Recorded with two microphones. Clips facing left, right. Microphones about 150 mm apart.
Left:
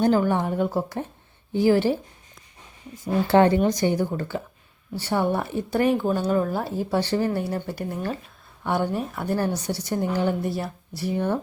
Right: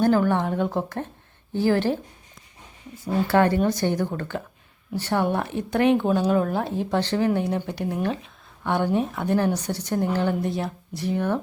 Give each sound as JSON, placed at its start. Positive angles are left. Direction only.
{"t": 0.0, "sound": "speech", "side_deg": 15}
{"t": 3.0, "sound": "speech", "side_deg": 25}
{"t": 3.6, "sound": "speech", "side_deg": 15}